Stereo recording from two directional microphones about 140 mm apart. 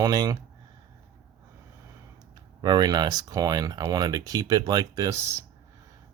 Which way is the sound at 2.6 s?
30° right (ahead or behind).